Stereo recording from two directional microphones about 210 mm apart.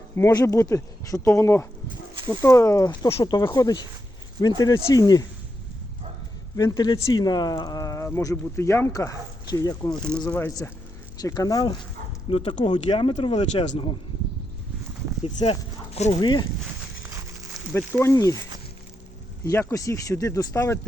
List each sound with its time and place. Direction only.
0.2 s speech: 15° left (ahead or behind)
6.6 s speech: 20° left (ahead or behind)
15.2 s speech: 30° left (ahead or behind)
17.7 s speech: 10° left (ahead or behind)
19.5 s speech: 15° left (ahead or behind)